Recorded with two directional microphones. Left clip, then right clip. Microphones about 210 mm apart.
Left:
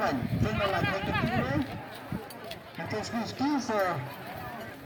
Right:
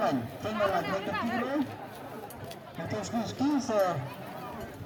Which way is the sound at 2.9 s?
15° right (ahead or behind).